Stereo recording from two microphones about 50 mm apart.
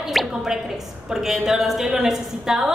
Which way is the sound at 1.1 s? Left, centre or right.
Centre.